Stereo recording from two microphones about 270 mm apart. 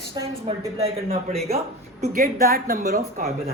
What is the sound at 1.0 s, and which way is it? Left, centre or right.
A woman's voice, right.